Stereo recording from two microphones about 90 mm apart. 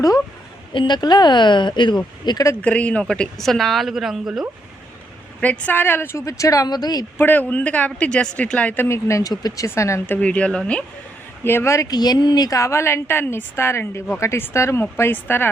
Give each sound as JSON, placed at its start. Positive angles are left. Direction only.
{"t": 0.7, "sound": "speech", "side_deg": 60}
{"t": 2.6, "sound": "a woman's voice", "side_deg": 15}
{"t": 5.4, "sound": "speech", "side_deg": 15}
{"t": 7.2, "sound": "a woman's voice", "side_deg": 20}
{"t": 9.3, "sound": "speech", "side_deg": 45}
{"t": 9.6, "sound": "speech", "side_deg": 30}
{"t": 10.2, "sound": "a woman's voice", "side_deg": 15}
{"t": 11.4, "sound": "speech", "side_deg": 30}
{"t": 11.9, "sound": "a woman's voice", "side_deg": 50}